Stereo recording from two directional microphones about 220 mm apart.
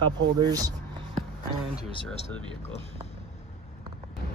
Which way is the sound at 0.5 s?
15° right (ahead or behind).